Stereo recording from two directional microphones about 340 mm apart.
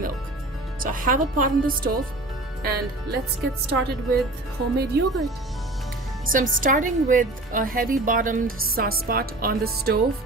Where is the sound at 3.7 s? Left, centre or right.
Right.